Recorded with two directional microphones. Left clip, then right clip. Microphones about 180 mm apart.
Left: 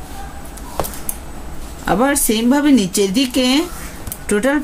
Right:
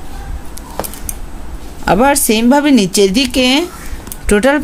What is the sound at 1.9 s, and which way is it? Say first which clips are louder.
Speech: right 5 dB; 50° right (ahead or behind).